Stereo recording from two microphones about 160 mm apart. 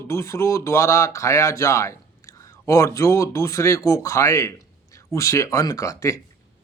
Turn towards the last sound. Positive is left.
turn(degrees=20)  # may be behind; listen again after turning